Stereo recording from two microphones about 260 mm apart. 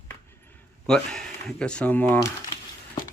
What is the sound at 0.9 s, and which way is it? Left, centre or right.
Speech, centre.